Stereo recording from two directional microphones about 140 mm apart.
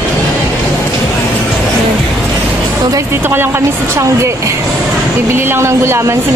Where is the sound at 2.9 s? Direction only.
20° right (ahead or behind).